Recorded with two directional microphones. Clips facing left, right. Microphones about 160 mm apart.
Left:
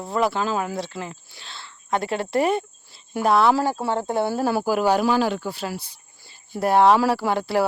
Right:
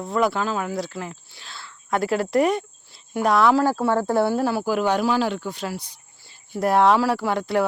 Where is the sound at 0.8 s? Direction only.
25° left (ahead or behind).